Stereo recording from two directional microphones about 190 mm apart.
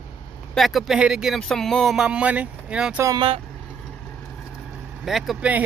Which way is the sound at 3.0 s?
25° right (ahead or behind).